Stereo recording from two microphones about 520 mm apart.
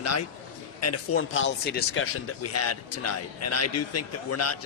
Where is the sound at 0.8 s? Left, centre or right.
Left.